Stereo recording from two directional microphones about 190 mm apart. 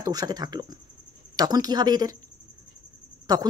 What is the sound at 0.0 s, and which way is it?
Speech, 20° right (ahead or behind).